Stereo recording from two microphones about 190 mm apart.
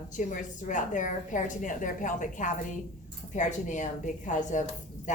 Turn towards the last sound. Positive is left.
turn(degrees=40)  # may be behind; listen again after turning